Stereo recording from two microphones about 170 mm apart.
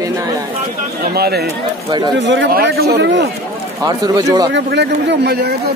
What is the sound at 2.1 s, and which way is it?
Speech, 90° right.